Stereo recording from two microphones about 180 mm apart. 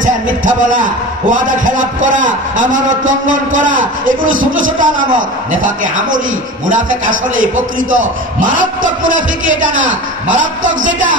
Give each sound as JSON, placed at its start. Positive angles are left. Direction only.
{"t": 0.0, "sound": "a man's voice", "side_deg": -45}
{"t": 10.3, "sound": "a man's voice", "side_deg": -45}